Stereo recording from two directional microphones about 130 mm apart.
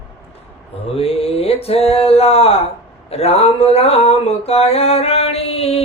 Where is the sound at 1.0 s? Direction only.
50° left (ahead or behind).